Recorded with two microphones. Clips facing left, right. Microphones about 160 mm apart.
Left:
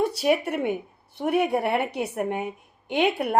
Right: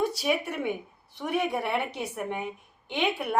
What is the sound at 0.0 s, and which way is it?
Speech, 60° left (ahead or behind).